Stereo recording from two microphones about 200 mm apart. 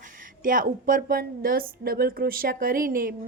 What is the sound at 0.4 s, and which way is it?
Speech, 45° right (ahead or behind).